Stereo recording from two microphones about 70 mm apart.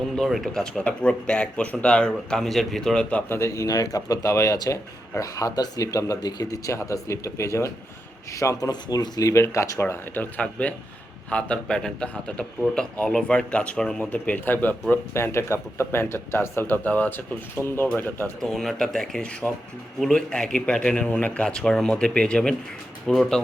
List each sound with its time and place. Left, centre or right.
0.2 s speech: centre
0.8 s a man's voice: centre
3.2 s speech: left
4.5 s speech: left
6.7 s speech: left
8.7 s speech: left
9.3 s speech: left
9.8 s a man's voice: left
15.1 s speech: left
18.3 s a man's voice: centre
23.0 s speech: centre